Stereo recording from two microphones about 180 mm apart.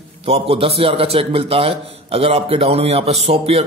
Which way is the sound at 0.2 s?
35° right (ahead or behind).